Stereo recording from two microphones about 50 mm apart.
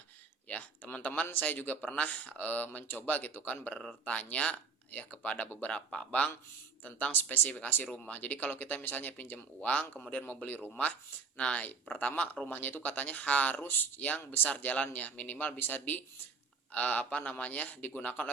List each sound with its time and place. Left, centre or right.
0.4 s speech: left
5.7 s speech: centre
6.1 s speech: left
9.6 s speech: left